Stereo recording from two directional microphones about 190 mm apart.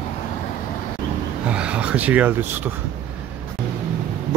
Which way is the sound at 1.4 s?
5° right (ahead or behind).